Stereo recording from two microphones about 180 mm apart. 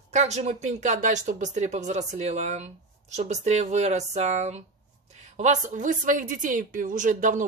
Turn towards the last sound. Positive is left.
turn(degrees=-45)  # may be behind; listen again after turning